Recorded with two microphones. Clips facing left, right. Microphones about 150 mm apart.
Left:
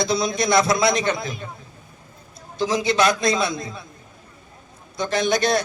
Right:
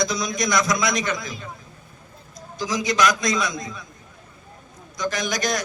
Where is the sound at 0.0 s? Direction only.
30° left (ahead or behind).